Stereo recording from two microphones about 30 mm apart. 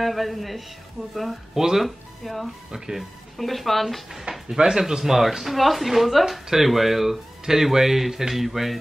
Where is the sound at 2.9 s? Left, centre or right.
Centre.